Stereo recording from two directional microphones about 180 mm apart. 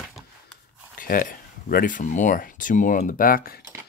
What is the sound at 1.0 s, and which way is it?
Speech, 50° left (ahead or behind).